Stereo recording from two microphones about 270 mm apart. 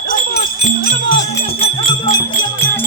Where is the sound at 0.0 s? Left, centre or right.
Left.